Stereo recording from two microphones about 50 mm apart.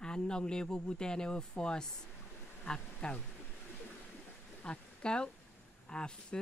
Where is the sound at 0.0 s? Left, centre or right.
Centre.